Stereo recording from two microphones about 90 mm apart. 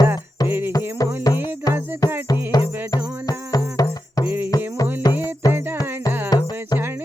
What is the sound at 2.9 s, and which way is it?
Music, 40° left (ahead or behind).